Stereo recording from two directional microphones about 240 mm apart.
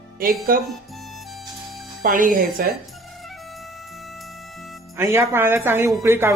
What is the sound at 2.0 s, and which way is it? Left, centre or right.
Speech, right.